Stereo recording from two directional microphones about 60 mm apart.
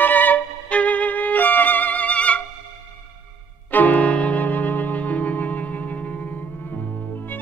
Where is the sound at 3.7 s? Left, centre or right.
Left.